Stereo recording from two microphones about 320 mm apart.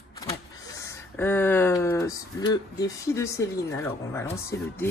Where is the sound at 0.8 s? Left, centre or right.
Centre.